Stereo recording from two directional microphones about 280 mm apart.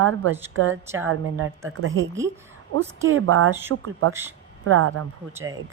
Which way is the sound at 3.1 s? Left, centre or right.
Right.